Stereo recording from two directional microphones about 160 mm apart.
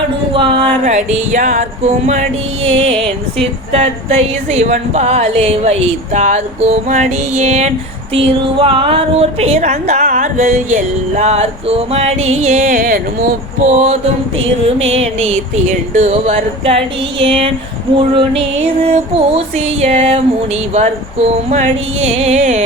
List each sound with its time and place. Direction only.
0.3 s music: 40° right (ahead or behind)
2.6 s a woman's voice: 35° right (ahead or behind)
8.1 s a woman's voice: 35° right (ahead or behind); by 13.0 s 60° right (ahead or behind)
13.7 s a woman's voice: 45° right (ahead or behind)